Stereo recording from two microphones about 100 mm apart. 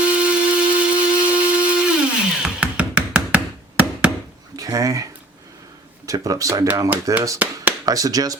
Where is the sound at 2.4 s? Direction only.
10° right (ahead or behind).